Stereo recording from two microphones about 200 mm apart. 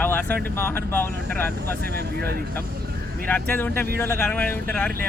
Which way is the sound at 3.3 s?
10° left (ahead or behind).